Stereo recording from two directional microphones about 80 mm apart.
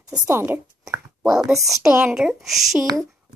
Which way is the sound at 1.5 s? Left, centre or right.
Right.